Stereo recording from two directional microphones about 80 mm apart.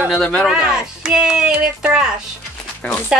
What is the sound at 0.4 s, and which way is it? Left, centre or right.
Speech, centre.